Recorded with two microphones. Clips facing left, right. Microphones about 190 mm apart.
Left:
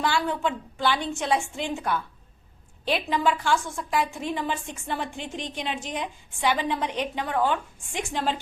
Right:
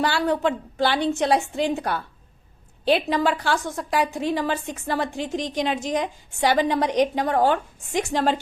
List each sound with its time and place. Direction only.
0.0 s a woman's voice: 35° right (ahead or behind)
3.2 s a woman's voice: 35° right (ahead or behind)